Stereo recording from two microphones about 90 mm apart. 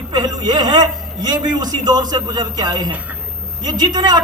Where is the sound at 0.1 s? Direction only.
50° right (ahead or behind).